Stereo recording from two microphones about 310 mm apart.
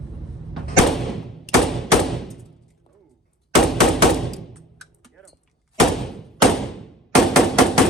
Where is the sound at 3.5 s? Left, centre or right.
Centre.